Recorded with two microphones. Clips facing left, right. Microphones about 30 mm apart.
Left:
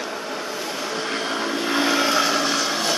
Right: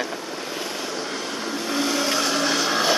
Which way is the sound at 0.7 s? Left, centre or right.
Centre.